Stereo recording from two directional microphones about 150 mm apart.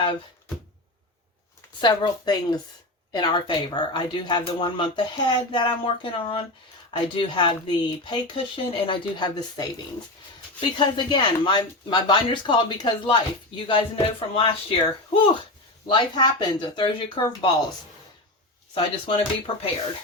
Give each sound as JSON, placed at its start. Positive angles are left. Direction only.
{"t": 1.8, "sound": "speech", "side_deg": 30}
{"t": 18.7, "sound": "speech", "side_deg": 35}